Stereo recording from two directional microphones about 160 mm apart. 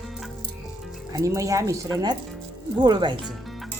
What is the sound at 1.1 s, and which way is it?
Speech, 20° right (ahead or behind).